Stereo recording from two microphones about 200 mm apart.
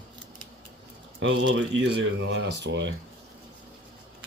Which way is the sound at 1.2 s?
65° right (ahead or behind).